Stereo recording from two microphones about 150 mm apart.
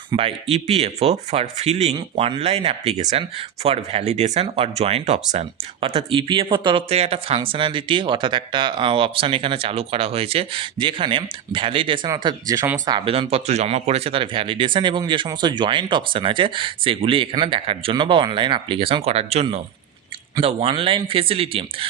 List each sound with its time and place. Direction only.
0.1 s speech: 40° right (ahead or behind)
13.1 s speech: 40° right (ahead or behind)